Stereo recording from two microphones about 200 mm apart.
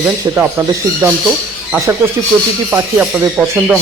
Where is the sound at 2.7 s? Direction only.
10° right (ahead or behind).